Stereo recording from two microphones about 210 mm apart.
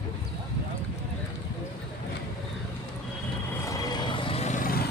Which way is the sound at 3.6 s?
15° left (ahead or behind).